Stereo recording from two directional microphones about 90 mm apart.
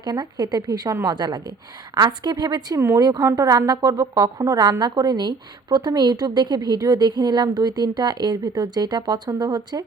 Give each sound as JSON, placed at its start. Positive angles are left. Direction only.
{"t": 0.0, "sound": "a woman's voice", "side_deg": -50}